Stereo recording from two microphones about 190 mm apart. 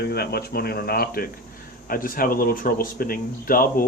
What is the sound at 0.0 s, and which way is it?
Speech, 55° left (ahead or behind).